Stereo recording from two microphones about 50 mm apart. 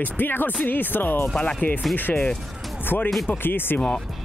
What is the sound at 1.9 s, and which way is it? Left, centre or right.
Speech, left.